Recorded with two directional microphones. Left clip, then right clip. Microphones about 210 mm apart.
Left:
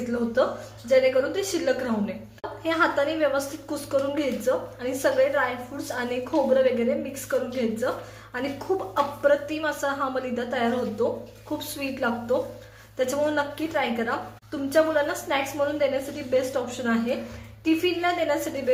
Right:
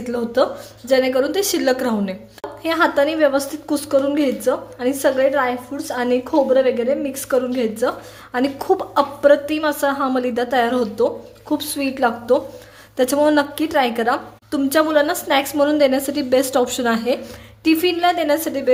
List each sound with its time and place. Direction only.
0.9 s a woman's voice: 50° right (ahead or behind)